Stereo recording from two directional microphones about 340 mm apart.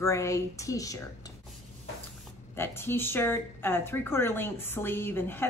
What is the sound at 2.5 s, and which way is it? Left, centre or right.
Speech, centre.